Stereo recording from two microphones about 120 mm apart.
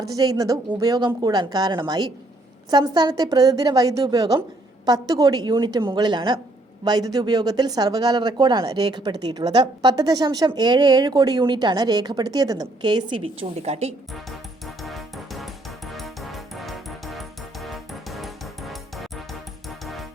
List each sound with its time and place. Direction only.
0.1 s speech: 30° right (ahead or behind)
13.6 s a woman's voice: 65° right (ahead or behind)
14.8 s music: centre (ahead or behind)